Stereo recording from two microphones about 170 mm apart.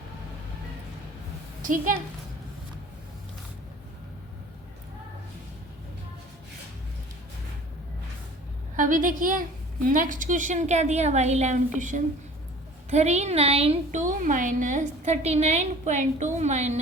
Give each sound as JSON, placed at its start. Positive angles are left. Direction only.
{"t": 1.6, "sound": "a woman's voice", "side_deg": -50}
{"t": 8.7, "sound": "a woman's voice", "side_deg": -50}